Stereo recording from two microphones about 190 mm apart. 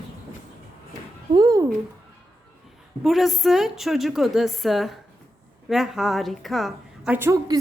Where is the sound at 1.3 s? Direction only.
20° right (ahead or behind).